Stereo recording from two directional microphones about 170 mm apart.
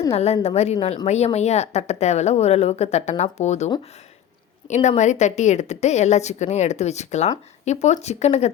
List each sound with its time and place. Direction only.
0.1 s a woman's voice: 40° left (ahead or behind)
4.7 s a woman's voice: 45° left (ahead or behind)